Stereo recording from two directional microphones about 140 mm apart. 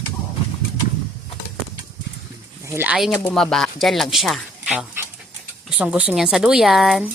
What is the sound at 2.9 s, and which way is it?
Speech, centre (ahead or behind).